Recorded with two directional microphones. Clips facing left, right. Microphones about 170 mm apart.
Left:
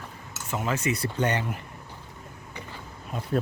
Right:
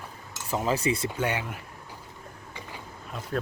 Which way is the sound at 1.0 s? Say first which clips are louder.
Left 2 dB; 5° right (ahead or behind).